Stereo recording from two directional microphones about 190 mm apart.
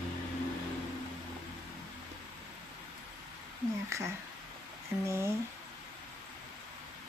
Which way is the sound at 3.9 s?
15° right (ahead or behind).